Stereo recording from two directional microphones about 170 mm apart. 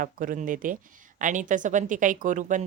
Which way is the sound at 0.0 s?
55° right (ahead or behind).